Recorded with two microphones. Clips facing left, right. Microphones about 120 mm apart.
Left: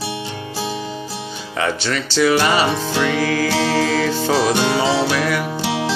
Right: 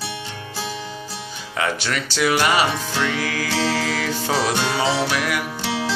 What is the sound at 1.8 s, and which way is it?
Speech, 10° right (ahead or behind).